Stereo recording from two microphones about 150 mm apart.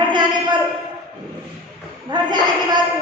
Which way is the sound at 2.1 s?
30° right (ahead or behind).